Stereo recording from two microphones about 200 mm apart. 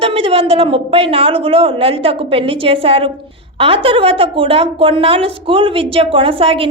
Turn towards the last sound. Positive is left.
turn(degrees=-25)  # may be behind; listen again after turning